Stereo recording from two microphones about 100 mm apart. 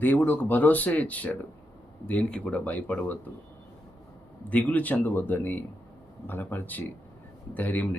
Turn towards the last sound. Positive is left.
turn(degrees=15)  # may be behind; listen again after turning